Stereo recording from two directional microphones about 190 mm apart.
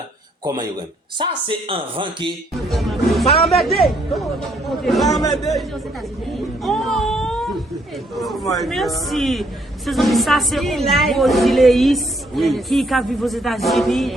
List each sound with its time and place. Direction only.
1.2 s speech: 25° right (ahead or behind)
2.6 s a woman's voice: centre (ahead or behind)
6.6 s wail: centre (ahead or behind)
8.1 s a woman's voice: centre (ahead or behind)